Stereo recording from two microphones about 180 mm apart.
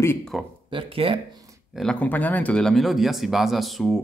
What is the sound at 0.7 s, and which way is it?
Speech, 30° right (ahead or behind).